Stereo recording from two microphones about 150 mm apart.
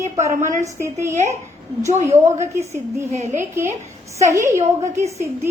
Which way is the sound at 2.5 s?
20° right (ahead or behind).